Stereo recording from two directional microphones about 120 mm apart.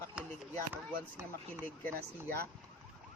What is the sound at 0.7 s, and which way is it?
Speech, 15° right (ahead or behind).